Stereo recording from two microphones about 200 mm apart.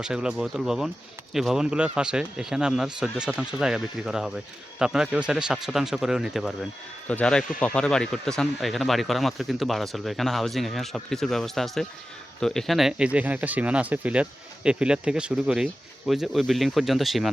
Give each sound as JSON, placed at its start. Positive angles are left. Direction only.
{"t": 0.0, "sound": "speech", "side_deg": -5}